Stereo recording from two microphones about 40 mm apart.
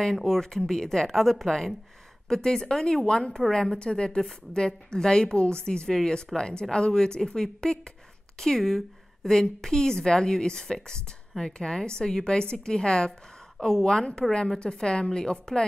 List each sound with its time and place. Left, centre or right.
0.0 s a woman's voice: centre